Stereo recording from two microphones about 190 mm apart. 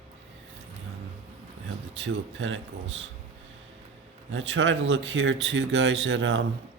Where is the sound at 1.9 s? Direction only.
75° right (ahead or behind).